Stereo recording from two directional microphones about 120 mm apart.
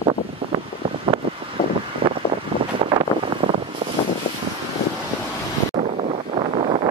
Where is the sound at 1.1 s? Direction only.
45° right (ahead or behind).